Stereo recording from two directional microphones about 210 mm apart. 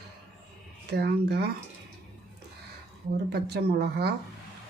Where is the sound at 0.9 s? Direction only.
50° right (ahead or behind).